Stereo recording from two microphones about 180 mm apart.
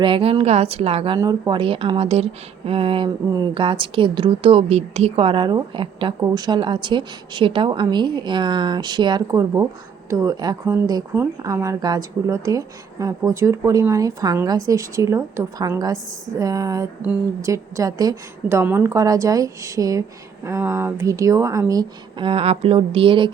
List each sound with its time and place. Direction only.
0.0 s a woman's voice: 30° right (ahead or behind)